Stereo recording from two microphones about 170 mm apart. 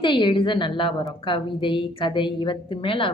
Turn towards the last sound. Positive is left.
turn(degrees=30)  # may be behind; listen again after turning